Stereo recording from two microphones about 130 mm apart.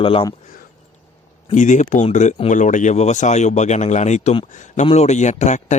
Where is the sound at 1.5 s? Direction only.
70° left (ahead or behind).